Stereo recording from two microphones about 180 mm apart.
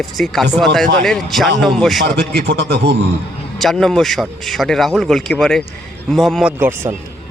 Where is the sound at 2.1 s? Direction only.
65° right (ahead or behind).